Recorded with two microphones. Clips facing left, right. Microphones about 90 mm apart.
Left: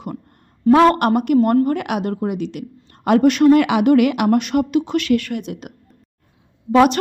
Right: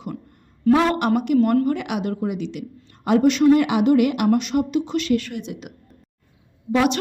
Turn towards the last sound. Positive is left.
turn(degrees=50)  # may be behind; listen again after turning